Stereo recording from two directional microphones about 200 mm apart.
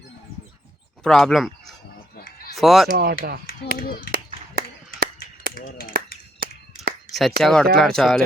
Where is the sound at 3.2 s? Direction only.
50° right (ahead or behind).